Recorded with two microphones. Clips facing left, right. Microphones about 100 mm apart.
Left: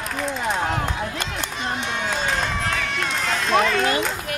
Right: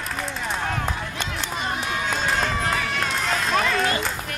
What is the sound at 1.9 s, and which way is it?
Run, centre (ahead or behind).